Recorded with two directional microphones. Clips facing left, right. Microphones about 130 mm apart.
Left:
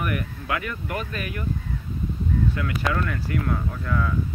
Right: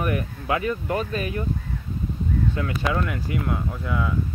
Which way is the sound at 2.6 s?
25° right (ahead or behind).